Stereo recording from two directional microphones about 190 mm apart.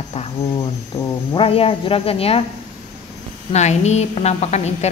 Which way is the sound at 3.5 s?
35° left (ahead or behind).